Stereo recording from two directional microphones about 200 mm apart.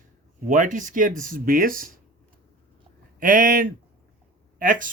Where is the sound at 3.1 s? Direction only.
45° right (ahead or behind).